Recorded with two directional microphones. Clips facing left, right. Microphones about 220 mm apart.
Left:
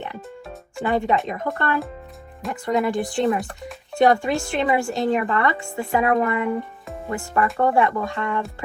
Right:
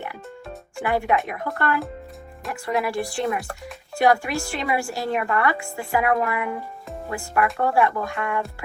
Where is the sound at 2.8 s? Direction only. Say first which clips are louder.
Left 4 dB; 20° left (ahead or behind).